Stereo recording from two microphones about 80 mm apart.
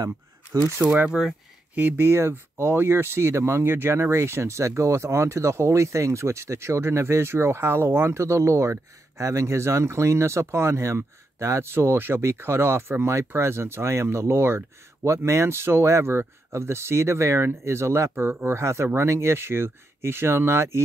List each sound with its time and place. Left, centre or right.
0.5 s speech: right
1.2 s speech: centre
1.8 s speech: right